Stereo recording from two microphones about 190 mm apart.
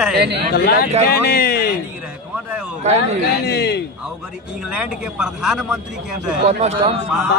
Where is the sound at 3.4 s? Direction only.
60° left (ahead or behind).